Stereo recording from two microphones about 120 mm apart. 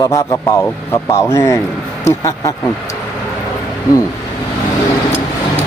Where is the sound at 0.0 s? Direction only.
30° left (ahead or behind).